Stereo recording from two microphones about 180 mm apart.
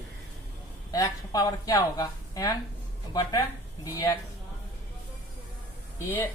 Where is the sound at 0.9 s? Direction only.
20° left (ahead or behind).